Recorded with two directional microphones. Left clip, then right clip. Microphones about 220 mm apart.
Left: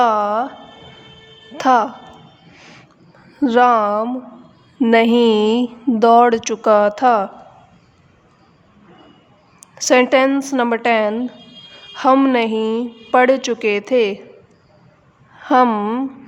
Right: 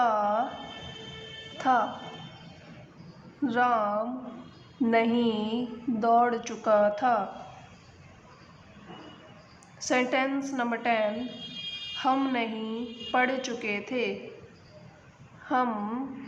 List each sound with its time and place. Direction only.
0.0 s music: 50° left (ahead or behind)
1.5 s speech: 50° left (ahead or behind)
3.4 s a woman's voice: 50° left (ahead or behind)
9.7 s a woman's voice: 50° left (ahead or behind)
15.4 s a woman's voice: 50° left (ahead or behind)